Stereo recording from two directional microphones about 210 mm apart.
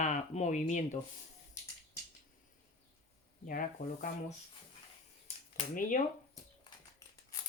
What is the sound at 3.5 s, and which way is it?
Speech, 40° left (ahead or behind).